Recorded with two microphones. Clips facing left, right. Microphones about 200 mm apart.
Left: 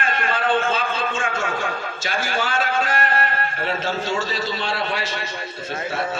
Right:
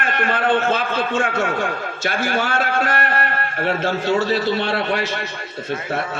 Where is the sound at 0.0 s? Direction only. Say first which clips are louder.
Right 3 dB; 60° right (ahead or behind).